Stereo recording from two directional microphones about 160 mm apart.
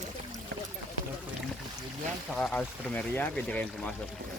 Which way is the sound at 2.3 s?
5° left (ahead or behind).